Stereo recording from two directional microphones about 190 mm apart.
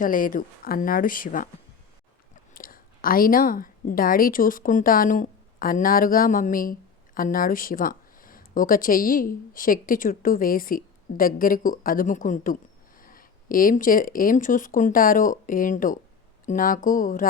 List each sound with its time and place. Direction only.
0.0 s speech: 45° left (ahead or behind)